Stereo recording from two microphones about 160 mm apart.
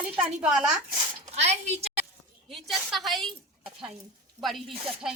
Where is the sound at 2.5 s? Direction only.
Centre (ahead or behind).